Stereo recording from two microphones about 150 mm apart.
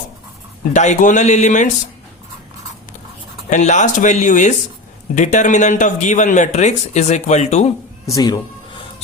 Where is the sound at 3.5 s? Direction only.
55° left (ahead or behind).